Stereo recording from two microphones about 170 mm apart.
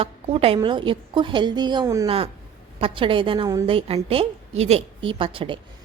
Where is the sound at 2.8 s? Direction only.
30° right (ahead or behind).